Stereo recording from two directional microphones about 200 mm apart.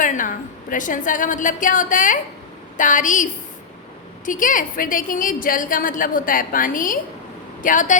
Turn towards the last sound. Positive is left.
turn(degrees=40)  # may be behind; listen again after turning